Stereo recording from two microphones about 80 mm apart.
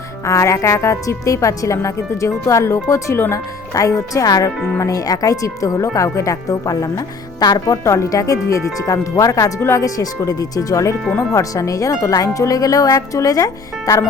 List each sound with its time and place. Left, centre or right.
0.3 s speech: left
7.6 s speech: left
9.6 s speech: left
9.8 s speech: left